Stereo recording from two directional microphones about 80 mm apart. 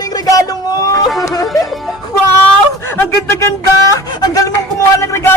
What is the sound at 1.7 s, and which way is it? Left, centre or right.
Music, centre.